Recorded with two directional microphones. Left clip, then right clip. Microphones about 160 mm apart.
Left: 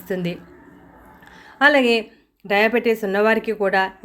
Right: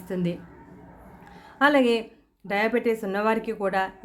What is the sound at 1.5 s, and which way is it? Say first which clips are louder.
Speech: left 5 dB; 10° left (ahead or behind).